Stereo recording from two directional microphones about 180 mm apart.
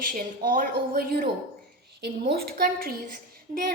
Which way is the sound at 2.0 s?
60° right (ahead or behind).